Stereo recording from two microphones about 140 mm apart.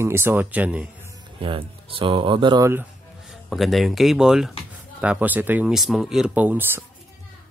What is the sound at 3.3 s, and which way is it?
Speech, centre (ahead or behind).